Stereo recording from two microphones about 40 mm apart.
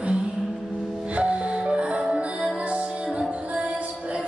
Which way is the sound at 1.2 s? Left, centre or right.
Right.